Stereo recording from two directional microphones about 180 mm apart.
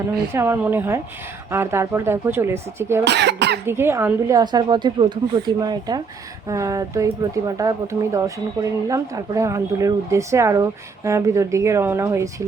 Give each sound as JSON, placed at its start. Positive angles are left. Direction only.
{"t": 0.3, "sound": "speech", "side_deg": -10}
{"t": 3.0, "sound": "speech", "side_deg": -70}
{"t": 3.7, "sound": "a woman's voice", "side_deg": -15}